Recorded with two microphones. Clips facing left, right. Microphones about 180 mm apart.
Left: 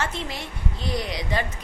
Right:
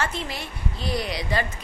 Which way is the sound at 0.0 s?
20° left (ahead or behind).